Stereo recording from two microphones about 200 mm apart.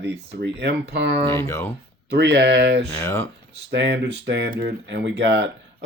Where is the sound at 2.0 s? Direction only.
60° right (ahead or behind).